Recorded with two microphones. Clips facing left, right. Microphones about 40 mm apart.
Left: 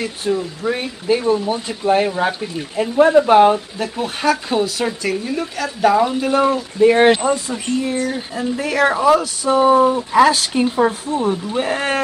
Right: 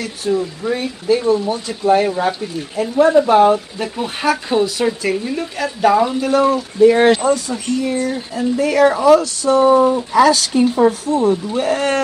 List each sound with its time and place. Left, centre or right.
0.3 s speech: centre
2.8 s speech: left
3.5 s speech: centre
6.4 s speech: left
10.9 s speech: left